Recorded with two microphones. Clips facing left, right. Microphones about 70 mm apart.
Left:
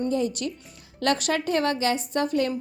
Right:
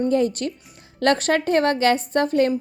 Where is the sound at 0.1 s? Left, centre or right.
Right.